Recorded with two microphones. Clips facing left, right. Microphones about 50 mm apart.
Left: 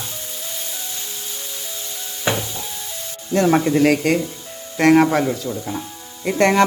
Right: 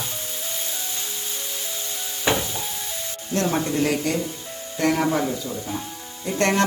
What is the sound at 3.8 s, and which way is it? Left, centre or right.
Speech, left.